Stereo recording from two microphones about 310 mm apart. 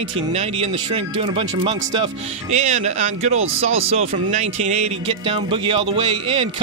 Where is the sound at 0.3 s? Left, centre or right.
Centre.